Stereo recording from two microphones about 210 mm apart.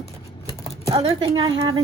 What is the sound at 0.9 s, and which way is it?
Speech, 25° right (ahead or behind).